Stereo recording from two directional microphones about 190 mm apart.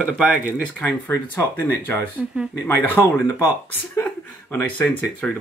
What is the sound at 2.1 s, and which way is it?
Speech, 5° right (ahead or behind).